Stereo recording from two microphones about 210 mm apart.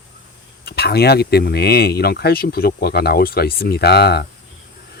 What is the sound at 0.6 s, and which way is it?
Speech, 50° left (ahead or behind).